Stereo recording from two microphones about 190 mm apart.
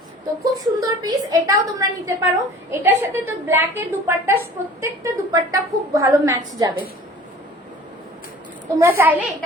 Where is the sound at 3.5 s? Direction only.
15° right (ahead or behind).